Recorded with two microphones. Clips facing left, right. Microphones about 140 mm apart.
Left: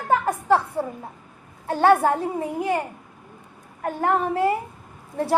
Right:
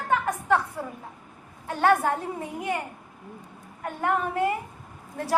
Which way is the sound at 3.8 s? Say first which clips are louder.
Left 4 dB; 35° left (ahead or behind).